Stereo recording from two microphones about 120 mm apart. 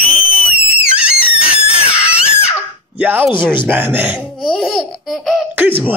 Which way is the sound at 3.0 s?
15° right (ahead or behind).